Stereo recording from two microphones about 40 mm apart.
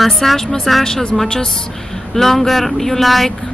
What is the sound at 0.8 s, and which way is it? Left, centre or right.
Speech, centre.